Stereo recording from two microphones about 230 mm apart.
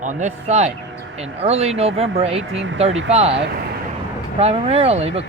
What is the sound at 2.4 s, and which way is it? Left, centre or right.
Speech, right.